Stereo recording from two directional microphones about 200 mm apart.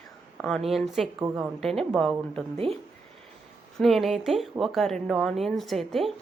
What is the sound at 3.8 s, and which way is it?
A woman's voice, centre (ahead or behind).